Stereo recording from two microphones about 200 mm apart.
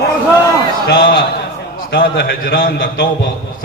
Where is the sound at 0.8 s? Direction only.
55° left (ahead or behind).